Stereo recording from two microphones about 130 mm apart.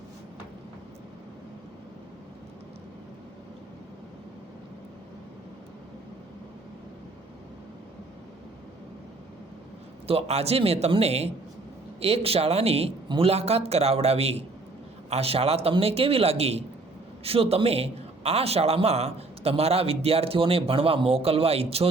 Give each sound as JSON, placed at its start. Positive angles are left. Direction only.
{"t": 10.1, "sound": "a man's voice", "side_deg": -50}